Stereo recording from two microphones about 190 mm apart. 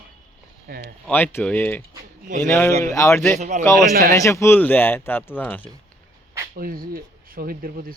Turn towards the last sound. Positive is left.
turn(degrees=-50)  # may be behind; listen again after turning